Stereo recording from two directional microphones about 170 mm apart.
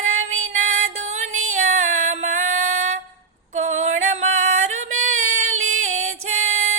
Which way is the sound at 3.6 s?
45° right (ahead or behind).